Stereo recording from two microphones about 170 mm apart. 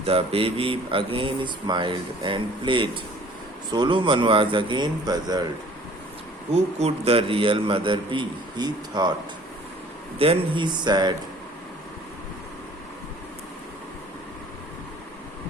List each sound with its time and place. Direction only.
0.0 s speech: 35° right (ahead or behind)
6.5 s speech: 40° right (ahead or behind)
10.2 s speech: 30° right (ahead or behind)